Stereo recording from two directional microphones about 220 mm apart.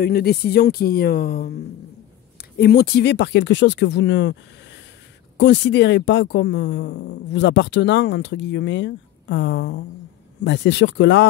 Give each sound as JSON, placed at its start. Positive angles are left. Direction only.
{"t": 0.0, "sound": "speech", "side_deg": 45}
{"t": 5.4, "sound": "speech", "side_deg": 55}